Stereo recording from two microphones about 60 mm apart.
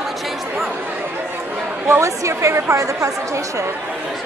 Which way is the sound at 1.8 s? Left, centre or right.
Right.